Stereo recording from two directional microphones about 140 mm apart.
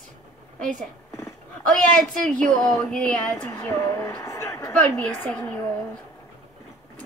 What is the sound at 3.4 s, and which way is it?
A woman's voice, 20° left (ahead or behind).